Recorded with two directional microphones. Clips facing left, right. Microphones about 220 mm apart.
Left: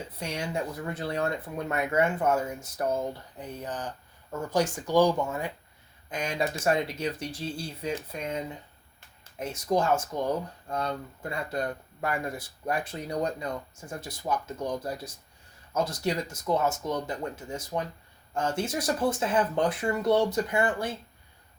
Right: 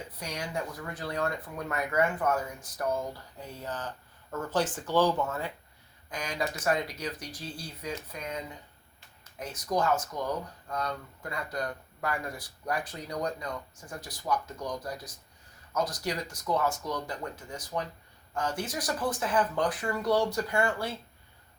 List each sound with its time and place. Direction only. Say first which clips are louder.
0.2 s speech: left 3 dB; 25° left (ahead or behind)
6.1 s speech: left 4 dB; 25° left (ahead or behind)
9.4 s speech: left 3 dB; 25° left (ahead or behind)